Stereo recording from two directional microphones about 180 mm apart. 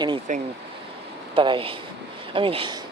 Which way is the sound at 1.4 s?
30° right (ahead or behind).